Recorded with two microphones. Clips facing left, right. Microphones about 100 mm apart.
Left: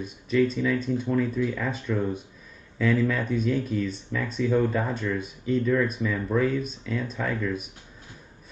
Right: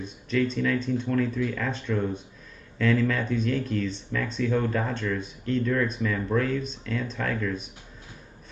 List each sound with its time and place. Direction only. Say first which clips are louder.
0.0 s speech: left 3 dB; 5° left (ahead or behind)